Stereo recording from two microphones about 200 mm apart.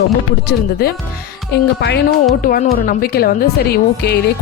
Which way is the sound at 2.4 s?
45° left (ahead or behind).